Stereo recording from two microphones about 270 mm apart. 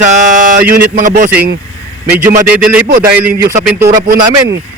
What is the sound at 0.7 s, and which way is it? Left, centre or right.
Speech, right.